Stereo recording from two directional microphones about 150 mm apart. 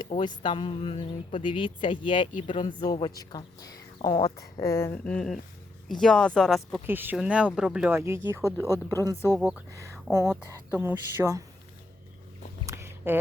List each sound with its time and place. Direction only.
0.1 s speech: 30° left (ahead or behind); by 6.8 s centre (ahead or behind)
6.8 s speech: 15° right (ahead or behind)
9.4 s speech: 5° right (ahead or behind)
9.7 s speech: 20° right (ahead or behind)
12.6 s a sound: 15° right (ahead or behind)